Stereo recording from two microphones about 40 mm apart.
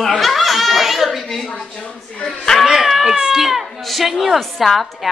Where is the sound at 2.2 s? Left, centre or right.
Centre.